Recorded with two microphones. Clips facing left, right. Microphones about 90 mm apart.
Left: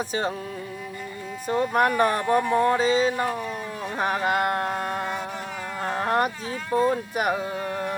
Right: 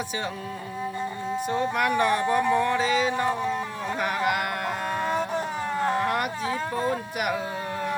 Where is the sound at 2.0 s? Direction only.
40° left (ahead or behind).